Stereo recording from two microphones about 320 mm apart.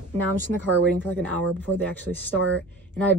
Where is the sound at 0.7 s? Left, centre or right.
Right.